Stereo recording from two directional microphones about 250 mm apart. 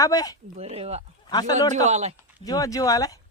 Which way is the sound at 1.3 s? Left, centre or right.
Centre.